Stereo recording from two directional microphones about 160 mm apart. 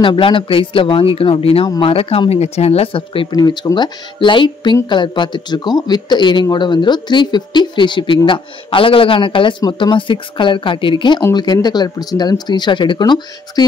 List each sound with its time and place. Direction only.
0.0 s speech: 30° left (ahead or behind)